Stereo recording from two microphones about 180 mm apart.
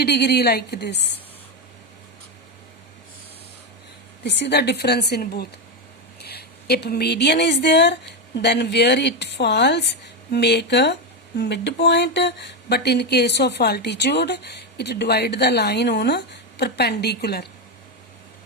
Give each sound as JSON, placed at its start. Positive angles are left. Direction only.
{"t": 0.0, "sound": "a woman's voice", "side_deg": 65}
{"t": 4.2, "sound": "speech", "side_deg": 70}